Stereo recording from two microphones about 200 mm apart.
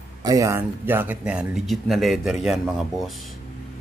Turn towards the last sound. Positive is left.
turn(degrees=0)  # may be behind; listen again after turning